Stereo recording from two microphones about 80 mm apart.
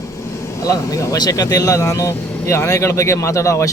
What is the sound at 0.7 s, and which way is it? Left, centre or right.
Speech, left.